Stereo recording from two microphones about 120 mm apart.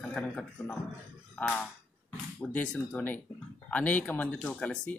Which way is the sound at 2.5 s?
10° left (ahead or behind).